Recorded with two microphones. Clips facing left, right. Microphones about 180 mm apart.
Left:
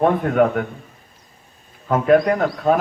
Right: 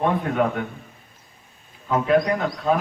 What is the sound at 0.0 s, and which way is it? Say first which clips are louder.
Speech: left 5 dB; 55° left (ahead or behind).